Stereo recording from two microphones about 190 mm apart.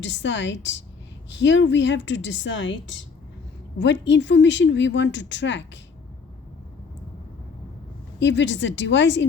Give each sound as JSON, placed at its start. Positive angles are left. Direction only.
{"t": 0.0, "sound": "speech", "side_deg": 70}
{"t": 8.2, "sound": "speech", "side_deg": 70}